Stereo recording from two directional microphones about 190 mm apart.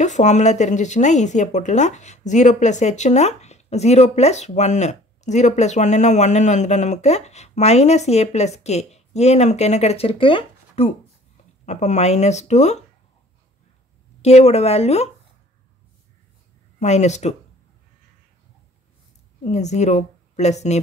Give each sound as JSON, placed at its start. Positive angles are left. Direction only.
{"t": 0.0, "sound": "a woman's voice", "side_deg": 40}
{"t": 14.2, "sound": "a woman's voice", "side_deg": 35}
{"t": 16.8, "sound": "a woman's voice", "side_deg": 35}
{"t": 19.4, "sound": "a woman's voice", "side_deg": 35}